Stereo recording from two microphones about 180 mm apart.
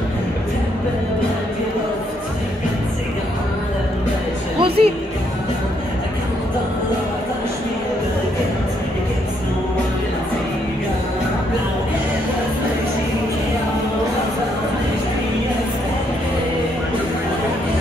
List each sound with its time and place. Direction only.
4.6 s music: 30° right (ahead or behind)